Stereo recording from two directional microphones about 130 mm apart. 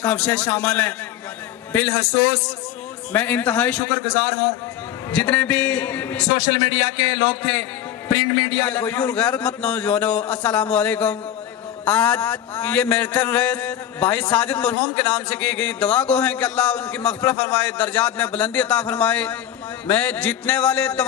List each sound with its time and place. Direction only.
0.0 s a man's voice: 10° left (ahead or behind)
6.3 s a man's voice: 40° left (ahead or behind)
8.6 s a man's voice: 10° left (ahead or behind)